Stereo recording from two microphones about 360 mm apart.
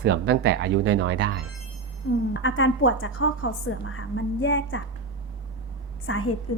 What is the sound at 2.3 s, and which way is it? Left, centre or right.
A woman's voice, left.